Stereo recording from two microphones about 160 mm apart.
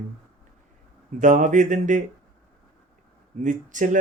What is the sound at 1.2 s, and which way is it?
Speech, 50° right (ahead or behind).